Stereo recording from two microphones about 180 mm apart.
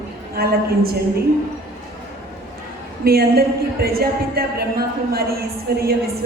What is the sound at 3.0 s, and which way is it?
A woman's voice, 60° right (ahead or behind).